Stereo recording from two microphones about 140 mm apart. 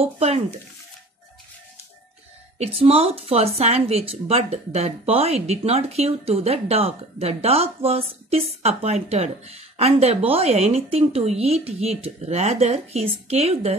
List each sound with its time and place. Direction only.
0.0 s speech: 50° right (ahead or behind)
2.6 s speech: 45° right (ahead or behind)